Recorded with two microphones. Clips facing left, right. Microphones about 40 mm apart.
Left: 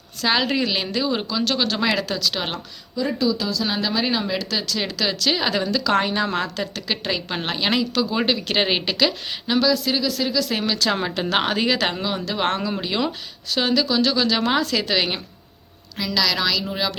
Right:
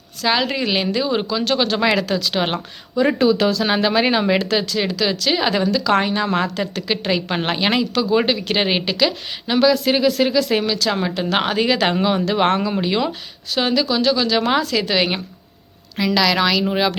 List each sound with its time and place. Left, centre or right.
0.2 s a woman's voice: centre
0.6 s a woman's voice: centre
2.3 s a woman's voice: right
2.9 s speech: right
3.6 s speech: right
4.6 s a woman's voice: centre
9.6 s speech: right
10.5 s a woman's voice: centre
16.0 s a woman's voice: right